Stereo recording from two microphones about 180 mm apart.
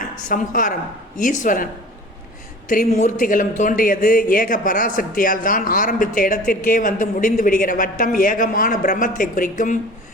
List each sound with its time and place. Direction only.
0.0 s a woman's voice: 50° left (ahead or behind)
2.6 s a man's voice: 45° left (ahead or behind)